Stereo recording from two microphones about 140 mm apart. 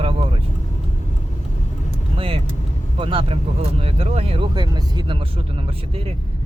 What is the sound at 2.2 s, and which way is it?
Speech, 40° right (ahead or behind).